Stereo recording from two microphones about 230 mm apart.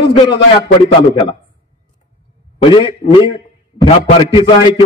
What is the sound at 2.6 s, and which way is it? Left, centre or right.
A man's voice, left.